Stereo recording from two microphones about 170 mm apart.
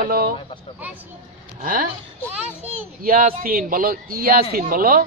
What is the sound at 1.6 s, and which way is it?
Speech, 55° right (ahead or behind).